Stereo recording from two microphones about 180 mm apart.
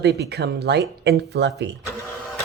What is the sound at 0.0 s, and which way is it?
Speech, 65° right (ahead or behind).